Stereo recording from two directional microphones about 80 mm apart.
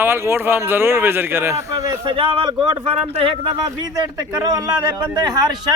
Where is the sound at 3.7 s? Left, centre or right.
Right.